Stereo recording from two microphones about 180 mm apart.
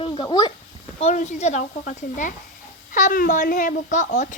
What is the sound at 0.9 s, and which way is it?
A child's voice, 40° left (ahead or behind).